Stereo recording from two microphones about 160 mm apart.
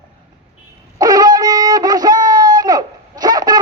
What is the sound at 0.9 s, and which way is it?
Wind instrument, 25° right (ahead or behind).